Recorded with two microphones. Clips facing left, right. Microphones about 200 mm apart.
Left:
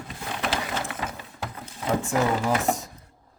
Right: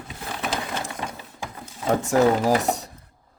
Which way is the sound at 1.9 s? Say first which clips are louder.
Right 5 dB; 40° right (ahead or behind).